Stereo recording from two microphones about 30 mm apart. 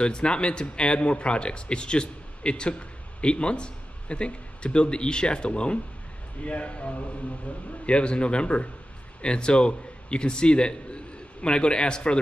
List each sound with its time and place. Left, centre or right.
0.0 s a man's voice: left